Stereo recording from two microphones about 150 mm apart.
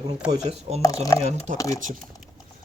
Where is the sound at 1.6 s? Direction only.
20° left (ahead or behind).